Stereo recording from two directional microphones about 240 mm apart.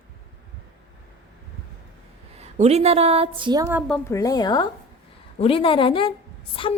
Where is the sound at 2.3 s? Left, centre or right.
Right.